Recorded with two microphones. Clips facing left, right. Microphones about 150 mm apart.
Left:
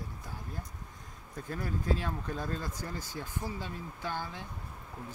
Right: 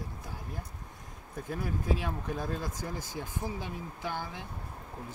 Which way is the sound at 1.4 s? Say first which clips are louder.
Right 1 dB; 10° right (ahead or behind).